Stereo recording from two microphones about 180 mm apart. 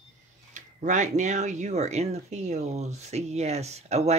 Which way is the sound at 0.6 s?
40° right (ahead or behind).